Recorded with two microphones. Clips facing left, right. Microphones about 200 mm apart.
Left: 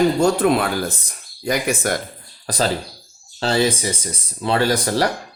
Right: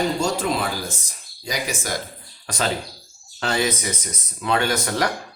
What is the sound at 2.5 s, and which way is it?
Speech, 35° left (ahead or behind).